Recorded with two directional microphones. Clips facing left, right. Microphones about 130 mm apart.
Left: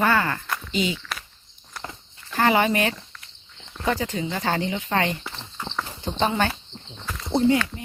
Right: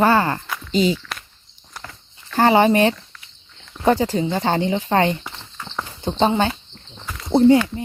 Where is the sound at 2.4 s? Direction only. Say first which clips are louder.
Right 6 dB; 30° right (ahead or behind).